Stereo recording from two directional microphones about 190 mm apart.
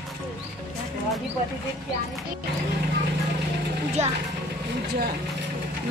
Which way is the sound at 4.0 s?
35° right (ahead or behind).